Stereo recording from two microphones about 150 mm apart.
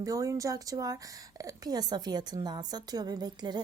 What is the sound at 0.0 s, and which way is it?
A woman's voice, 20° right (ahead or behind).